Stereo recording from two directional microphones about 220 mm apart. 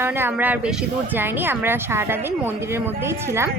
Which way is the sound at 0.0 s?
10° right (ahead or behind).